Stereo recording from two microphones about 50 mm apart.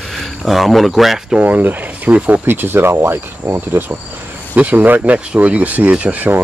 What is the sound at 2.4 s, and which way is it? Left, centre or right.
Cricket, right.